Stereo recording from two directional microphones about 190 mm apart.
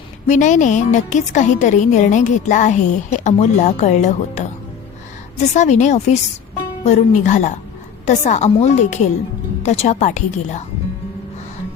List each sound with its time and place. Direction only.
0.3 s a woman's voice: 40° left (ahead or behind)
5.5 s a woman's voice: 40° left (ahead or behind)